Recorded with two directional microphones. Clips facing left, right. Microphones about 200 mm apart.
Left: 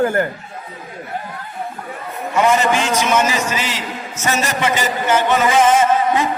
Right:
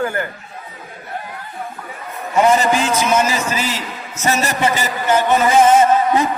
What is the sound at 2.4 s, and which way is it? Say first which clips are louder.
A man's voice: right 1 dB; 35° right (ahead or behind).